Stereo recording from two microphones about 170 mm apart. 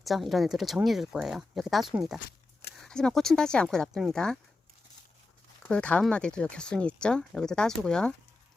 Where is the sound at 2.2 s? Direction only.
60° left (ahead or behind).